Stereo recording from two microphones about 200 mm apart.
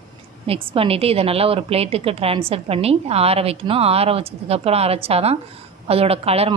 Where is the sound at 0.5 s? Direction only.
30° right (ahead or behind).